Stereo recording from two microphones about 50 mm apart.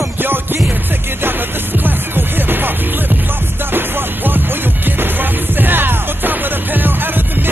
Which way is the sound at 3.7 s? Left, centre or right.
Right.